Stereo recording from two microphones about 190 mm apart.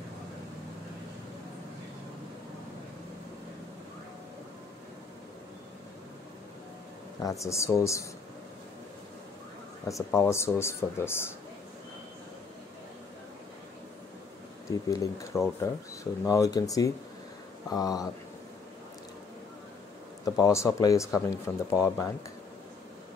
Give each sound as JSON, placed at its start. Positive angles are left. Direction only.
{"t": 7.2, "sound": "speech", "side_deg": 15}
{"t": 9.8, "sound": "speech", "side_deg": 15}
{"t": 15.6, "sound": "speech", "side_deg": 15}
{"t": 20.2, "sound": "speech", "side_deg": 15}